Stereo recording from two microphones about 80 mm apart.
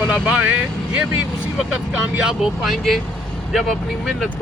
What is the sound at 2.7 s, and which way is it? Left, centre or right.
Speech, centre.